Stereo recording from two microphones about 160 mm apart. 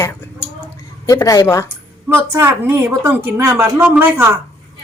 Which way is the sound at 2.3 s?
15° right (ahead or behind).